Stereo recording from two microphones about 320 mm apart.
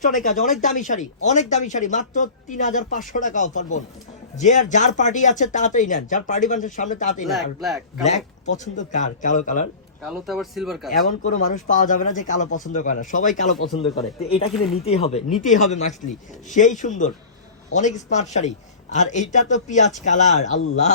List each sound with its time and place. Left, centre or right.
0.0 s a man's voice: left
7.3 s speech: centre
8.0 s a man's voice: left
10.0 s speech: centre
11.2 s a man's voice: left